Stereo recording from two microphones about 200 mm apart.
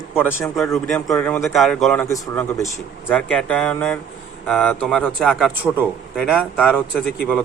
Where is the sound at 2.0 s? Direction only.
15° left (ahead or behind).